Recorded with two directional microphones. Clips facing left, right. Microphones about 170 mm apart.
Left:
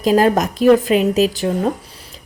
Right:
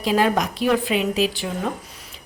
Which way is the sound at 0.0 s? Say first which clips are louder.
Left 6 dB; 45° left (ahead or behind).